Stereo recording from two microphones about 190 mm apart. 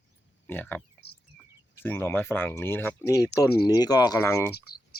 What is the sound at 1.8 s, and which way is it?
Speech, 10° left (ahead or behind).